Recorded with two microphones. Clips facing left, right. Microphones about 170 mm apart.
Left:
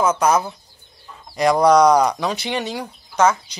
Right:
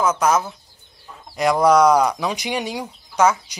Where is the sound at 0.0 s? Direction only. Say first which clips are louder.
Left 1 dB; centre (ahead or behind).